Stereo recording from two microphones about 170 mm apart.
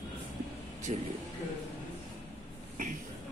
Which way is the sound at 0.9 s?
45° right (ahead or behind).